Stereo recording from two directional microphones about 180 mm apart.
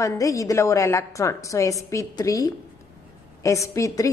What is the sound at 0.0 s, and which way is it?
A woman's voice, 15° left (ahead or behind).